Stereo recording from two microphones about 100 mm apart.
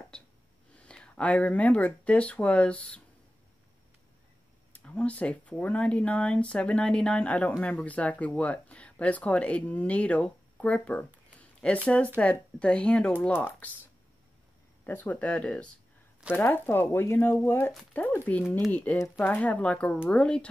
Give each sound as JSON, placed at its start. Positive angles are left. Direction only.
{"t": 0.1, "sound": "speech", "side_deg": 10}
{"t": 4.7, "sound": "speech", "side_deg": 15}
{"t": 14.9, "sound": "speech", "side_deg": 20}